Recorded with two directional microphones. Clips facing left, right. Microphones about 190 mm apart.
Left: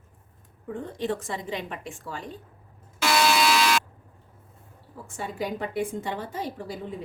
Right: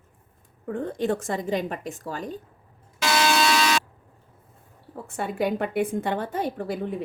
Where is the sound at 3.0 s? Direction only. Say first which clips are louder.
Even; centre (ahead or behind).